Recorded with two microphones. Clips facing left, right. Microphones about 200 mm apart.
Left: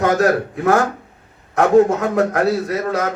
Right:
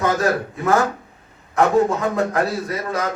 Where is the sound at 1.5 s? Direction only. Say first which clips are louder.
Left 4 dB; 65° left (ahead or behind).